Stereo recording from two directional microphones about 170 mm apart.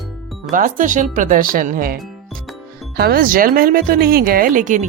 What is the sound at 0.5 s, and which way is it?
Speech, 50° right (ahead or behind).